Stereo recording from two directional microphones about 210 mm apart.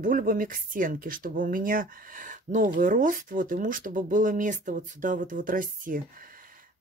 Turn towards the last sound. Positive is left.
turn(degrees=-40)  # may be behind; listen again after turning